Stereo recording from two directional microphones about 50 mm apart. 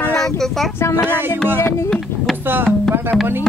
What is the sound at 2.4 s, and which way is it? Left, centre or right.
Speech, right.